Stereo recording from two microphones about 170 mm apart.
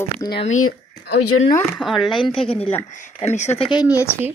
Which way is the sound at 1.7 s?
Centre (ahead or behind).